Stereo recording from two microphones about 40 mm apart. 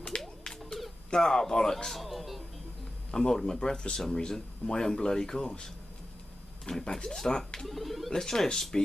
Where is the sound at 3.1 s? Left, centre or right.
Centre.